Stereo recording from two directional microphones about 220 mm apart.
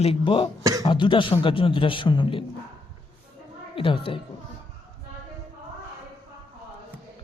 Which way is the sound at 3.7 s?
25° left (ahead or behind).